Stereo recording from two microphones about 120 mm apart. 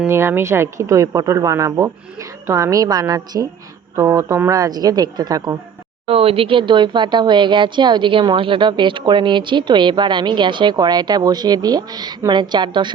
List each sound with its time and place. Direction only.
0.1 s speech: 20° right (ahead or behind)
6.1 s speech: 50° right (ahead or behind)